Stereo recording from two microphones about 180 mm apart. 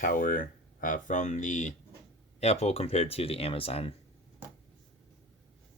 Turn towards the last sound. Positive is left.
turn(degrees=30)  # may be behind; listen again after turning